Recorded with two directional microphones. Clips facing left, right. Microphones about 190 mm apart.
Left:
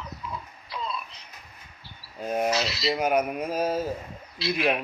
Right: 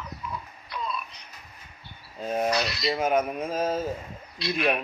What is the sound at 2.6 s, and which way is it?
Speech, 25° left (ahead or behind).